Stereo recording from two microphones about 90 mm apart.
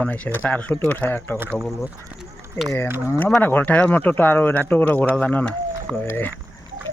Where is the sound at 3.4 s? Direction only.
20° left (ahead or behind).